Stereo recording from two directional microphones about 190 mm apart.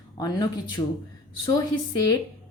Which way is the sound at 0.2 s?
20° left (ahead or behind).